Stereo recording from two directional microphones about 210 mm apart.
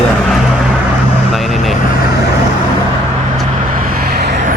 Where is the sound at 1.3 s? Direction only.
Centre (ahead or behind).